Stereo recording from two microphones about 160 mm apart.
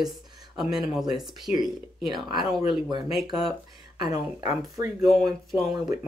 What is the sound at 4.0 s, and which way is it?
Speech, 25° right (ahead or behind).